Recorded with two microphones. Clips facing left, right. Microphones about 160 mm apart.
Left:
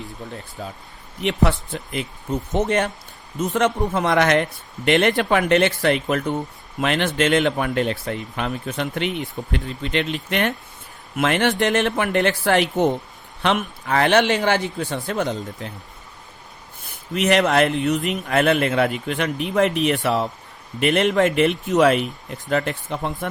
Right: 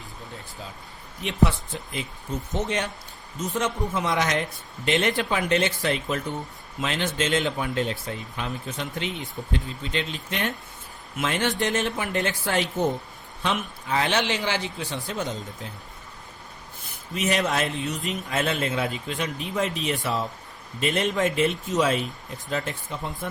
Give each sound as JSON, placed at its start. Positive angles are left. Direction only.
{"t": 0.6, "sound": "speech", "side_deg": 55}
{"t": 1.2, "sound": "speech", "side_deg": 65}
{"t": 3.5, "sound": "speech", "side_deg": 65}
{"t": 16.8, "sound": "speech", "side_deg": 70}